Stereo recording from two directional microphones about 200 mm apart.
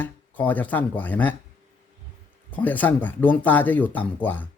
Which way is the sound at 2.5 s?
10° left (ahead or behind).